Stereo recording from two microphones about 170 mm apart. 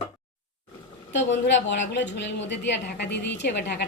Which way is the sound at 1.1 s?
90° left.